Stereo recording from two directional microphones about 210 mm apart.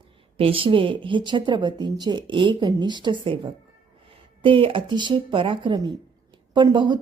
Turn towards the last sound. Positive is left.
turn(degrees=-20)  # may be behind; listen again after turning